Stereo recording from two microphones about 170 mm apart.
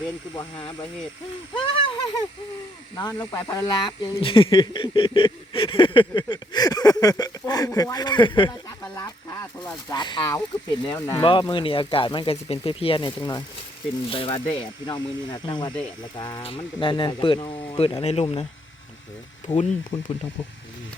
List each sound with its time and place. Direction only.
1.5 s speech: 30° left (ahead or behind)
9.0 s a sound: 20° left (ahead or behind)
11.2 s speech: 30° left (ahead or behind)
19.9 s speech: 35° left (ahead or behind)